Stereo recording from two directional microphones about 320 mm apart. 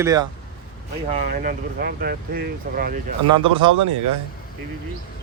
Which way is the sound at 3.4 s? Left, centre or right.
Centre.